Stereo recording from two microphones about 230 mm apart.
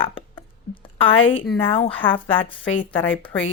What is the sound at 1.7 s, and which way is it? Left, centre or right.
Speech, left.